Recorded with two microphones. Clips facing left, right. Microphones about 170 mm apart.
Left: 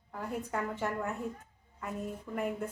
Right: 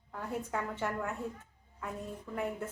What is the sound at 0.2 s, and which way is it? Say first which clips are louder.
Speech: left 1 dB; centre (ahead or behind).